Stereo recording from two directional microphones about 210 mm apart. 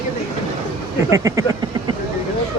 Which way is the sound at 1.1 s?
15° right (ahead or behind).